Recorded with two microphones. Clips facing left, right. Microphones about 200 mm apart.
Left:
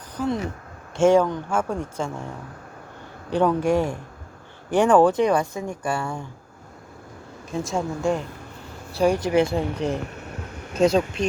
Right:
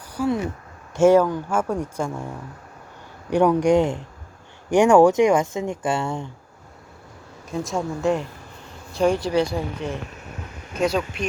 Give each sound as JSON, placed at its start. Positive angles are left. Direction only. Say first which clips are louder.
{"t": 0.2, "sound": "a woman's voice", "louder": "right 2 dB", "side_deg": -10}
{"t": 3.2, "sound": "a woman's voice", "louder": "right 3 dB", "side_deg": -15}
{"t": 7.5, "sound": "speech", "louder": "even", "side_deg": 0}
{"t": 9.2, "sound": "speech", "louder": "left 2 dB", "side_deg": 20}
{"t": 10.8, "sound": "speech", "louder": "left 3 dB", "side_deg": 25}